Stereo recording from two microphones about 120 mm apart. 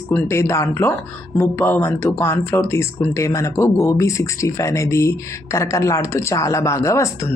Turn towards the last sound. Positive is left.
turn(degrees=25)  # may be behind; listen again after turning